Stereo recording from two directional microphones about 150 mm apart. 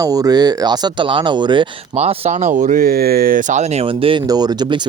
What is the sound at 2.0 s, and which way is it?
Speech, 45° right (ahead or behind).